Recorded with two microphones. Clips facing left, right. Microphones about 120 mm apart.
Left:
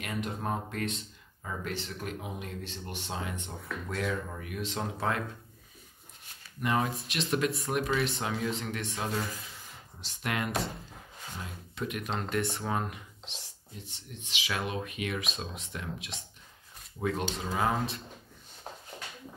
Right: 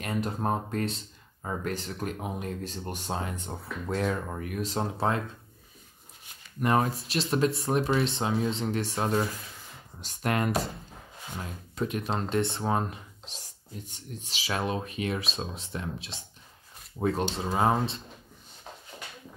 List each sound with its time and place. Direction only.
0.0 s speech: 35° right (ahead or behind)
6.6 s speech: 45° right (ahead or behind)
11.7 s speech: 30° right (ahead or behind)